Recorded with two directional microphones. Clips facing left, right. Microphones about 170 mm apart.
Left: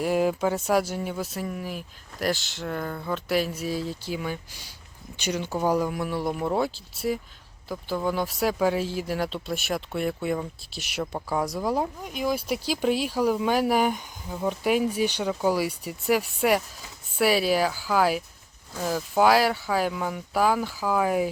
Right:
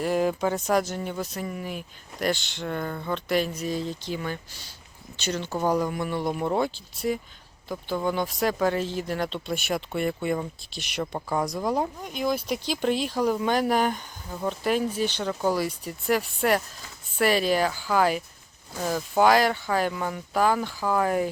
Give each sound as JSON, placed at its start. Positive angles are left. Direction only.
{"t": 0.0, "sound": "speech", "side_deg": 10}